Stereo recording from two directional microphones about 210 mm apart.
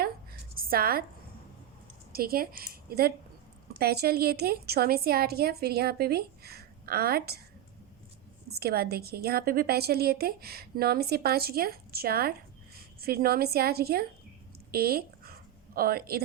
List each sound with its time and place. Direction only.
0.5 s a woman's voice: 45° right (ahead or behind)
2.1 s a woman's voice: 45° right (ahead or behind)
8.5 s a woman's voice: 45° right (ahead or behind)
14.7 s a sound: 45° right (ahead or behind)